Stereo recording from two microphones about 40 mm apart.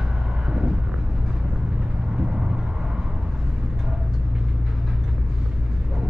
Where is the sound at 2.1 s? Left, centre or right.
Centre.